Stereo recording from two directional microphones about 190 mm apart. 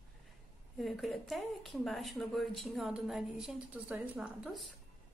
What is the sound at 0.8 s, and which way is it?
Speech, centre (ahead or behind).